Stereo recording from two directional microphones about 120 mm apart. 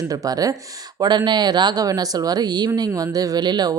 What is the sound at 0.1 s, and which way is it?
Speech, 30° right (ahead or behind).